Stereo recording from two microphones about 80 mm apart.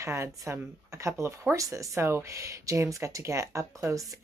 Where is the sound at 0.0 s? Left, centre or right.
Right.